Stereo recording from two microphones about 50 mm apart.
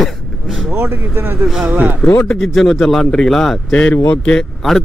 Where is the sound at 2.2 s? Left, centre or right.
Centre.